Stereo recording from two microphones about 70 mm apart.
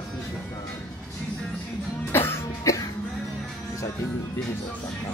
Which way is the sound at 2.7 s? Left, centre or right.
Left.